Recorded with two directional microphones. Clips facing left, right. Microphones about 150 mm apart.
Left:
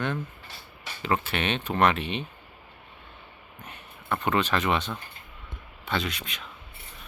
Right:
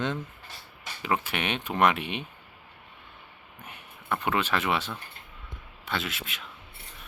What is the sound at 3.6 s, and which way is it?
Speech, 10° right (ahead or behind).